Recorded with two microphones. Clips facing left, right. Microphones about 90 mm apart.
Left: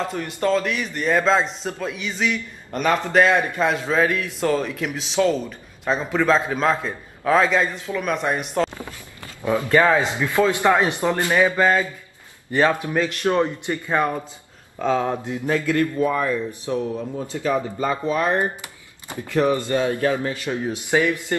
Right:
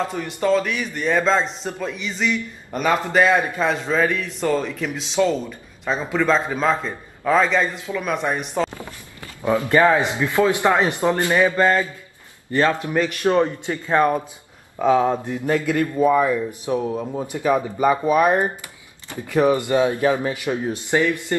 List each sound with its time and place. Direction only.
0.1 s a man's voice: 5° right (ahead or behind)
9.4 s a man's voice: 20° right (ahead or behind)
11.4 s speech: 15° left (ahead or behind)
13.0 s speech: 15° right (ahead or behind)
20.7 s speech: 15° left (ahead or behind)